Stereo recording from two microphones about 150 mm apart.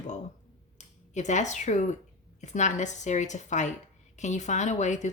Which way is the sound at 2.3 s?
50° left (ahead or behind).